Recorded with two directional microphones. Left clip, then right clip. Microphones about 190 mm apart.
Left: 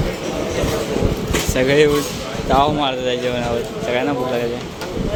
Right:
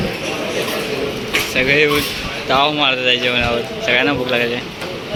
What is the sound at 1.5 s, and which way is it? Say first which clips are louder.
Speech: even; 25° left (ahead or behind).